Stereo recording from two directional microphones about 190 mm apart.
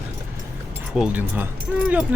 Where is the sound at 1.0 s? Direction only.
10° right (ahead or behind).